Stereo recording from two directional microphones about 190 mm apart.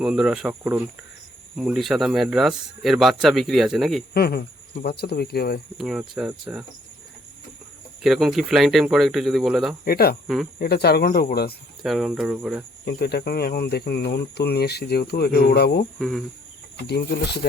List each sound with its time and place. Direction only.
0.0 s speech: 5° right (ahead or behind)
4.1 s speech: 55° left (ahead or behind)
5.7 s speech: centre (ahead or behind)
8.0 s speech: centre (ahead or behind)
9.8 s cricket: 55° left (ahead or behind)
10.2 s speech: centre (ahead or behind)
10.6 s speech: 55° left (ahead or behind)
11.8 s speech: centre (ahead or behind)
12.8 s speech: 55° left (ahead or behind)
16.0 s speech: centre (ahead or behind)
16.8 s speech: 60° left (ahead or behind)